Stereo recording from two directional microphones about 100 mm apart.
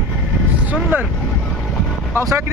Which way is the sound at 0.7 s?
15° right (ahead or behind).